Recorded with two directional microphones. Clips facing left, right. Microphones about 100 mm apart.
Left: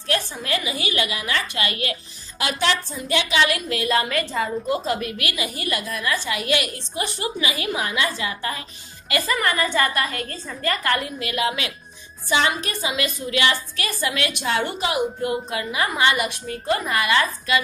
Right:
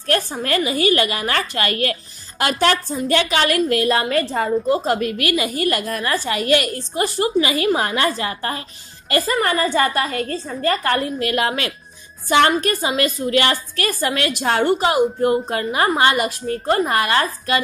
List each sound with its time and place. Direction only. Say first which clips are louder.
0.0 s a woman's voice: right 5 dB; 45° right (ahead or behind)